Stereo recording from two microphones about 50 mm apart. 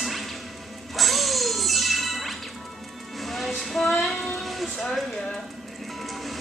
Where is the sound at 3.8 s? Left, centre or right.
Centre.